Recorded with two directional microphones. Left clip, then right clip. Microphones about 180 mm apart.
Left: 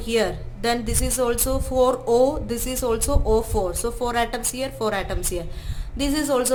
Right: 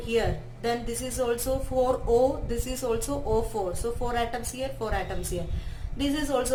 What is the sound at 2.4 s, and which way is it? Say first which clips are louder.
Speech: left 5 dB; 40° left (ahead or behind).